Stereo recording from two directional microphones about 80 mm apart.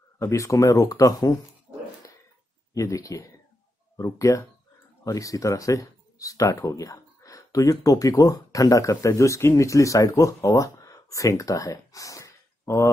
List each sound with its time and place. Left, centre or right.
0.2 s speech: left
2.7 s speech: left